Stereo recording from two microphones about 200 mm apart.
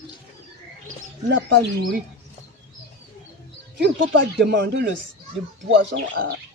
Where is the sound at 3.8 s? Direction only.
55° right (ahead or behind).